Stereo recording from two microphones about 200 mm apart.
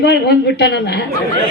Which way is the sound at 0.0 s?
55° left (ahead or behind).